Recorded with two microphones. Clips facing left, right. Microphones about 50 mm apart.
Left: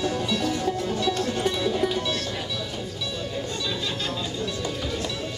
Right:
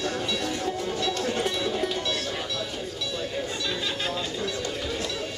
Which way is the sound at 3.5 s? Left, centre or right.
Centre.